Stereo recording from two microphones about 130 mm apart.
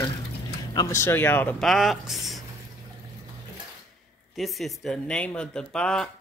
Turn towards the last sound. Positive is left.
turn(degrees=5)  # may be behind; listen again after turning